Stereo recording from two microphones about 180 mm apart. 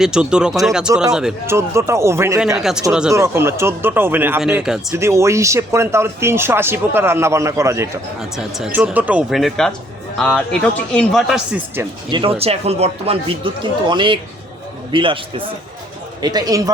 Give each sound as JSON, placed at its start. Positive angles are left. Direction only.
{"t": 0.0, "sound": "speech", "side_deg": -5}
{"t": 1.5, "sound": "speech", "side_deg": -15}
{"t": 2.6, "sound": "speech", "side_deg": 0}
{"t": 3.1, "sound": "speech", "side_deg": -15}
{"t": 4.9, "sound": "speech", "side_deg": -15}
{"t": 8.2, "sound": "speech", "side_deg": 0}
{"t": 12.1, "sound": "speech", "side_deg": -30}